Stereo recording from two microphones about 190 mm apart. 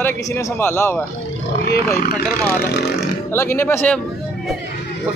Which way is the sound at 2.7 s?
60° left (ahead or behind).